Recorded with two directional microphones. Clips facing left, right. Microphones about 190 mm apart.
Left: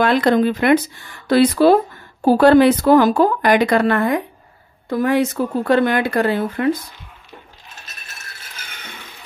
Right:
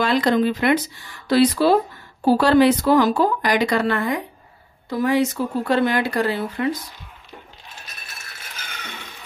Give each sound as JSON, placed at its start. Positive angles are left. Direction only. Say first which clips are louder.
{"t": 0.0, "sound": "speech", "louder": "left 3 dB", "side_deg": 55}